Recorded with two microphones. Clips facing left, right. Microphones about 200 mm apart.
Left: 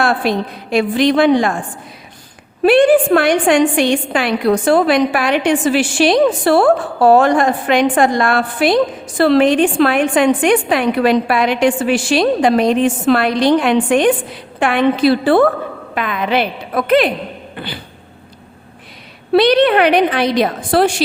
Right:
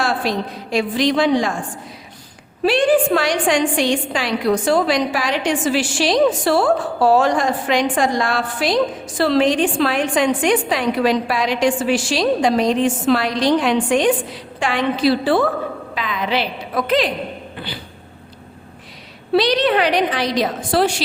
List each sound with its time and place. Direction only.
0.0 s a woman's voice: 60° left (ahead or behind)
2.6 s a woman's voice: 55° left (ahead or behind)
19.3 s a woman's voice: 60° left (ahead or behind)